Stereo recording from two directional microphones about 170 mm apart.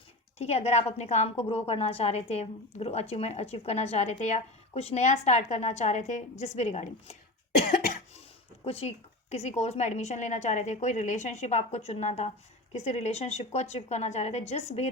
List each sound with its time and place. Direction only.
0.3 s a woman's voice: 40° left (ahead or behind)
8.6 s a woman's voice: 35° left (ahead or behind)